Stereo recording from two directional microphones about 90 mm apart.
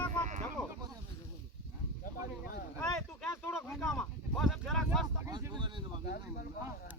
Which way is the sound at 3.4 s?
10° left (ahead or behind).